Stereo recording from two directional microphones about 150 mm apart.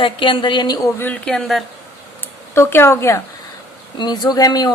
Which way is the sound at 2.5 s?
15° left (ahead or behind).